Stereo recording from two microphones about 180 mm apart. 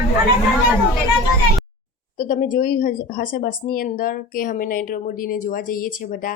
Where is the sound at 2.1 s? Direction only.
45° left (ahead or behind).